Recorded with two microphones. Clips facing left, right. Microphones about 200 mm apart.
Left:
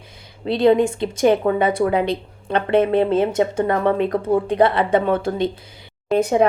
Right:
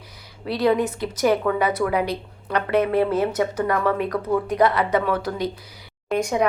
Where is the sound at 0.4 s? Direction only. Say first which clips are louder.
Left 5 dB; 25° left (ahead or behind).